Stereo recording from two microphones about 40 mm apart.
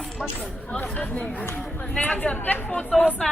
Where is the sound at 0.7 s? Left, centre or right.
Left.